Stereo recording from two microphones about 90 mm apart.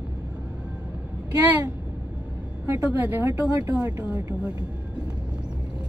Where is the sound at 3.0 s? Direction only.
20° right (ahead or behind).